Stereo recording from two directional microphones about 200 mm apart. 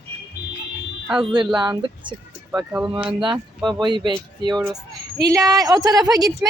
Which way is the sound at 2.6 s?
5° right (ahead or behind).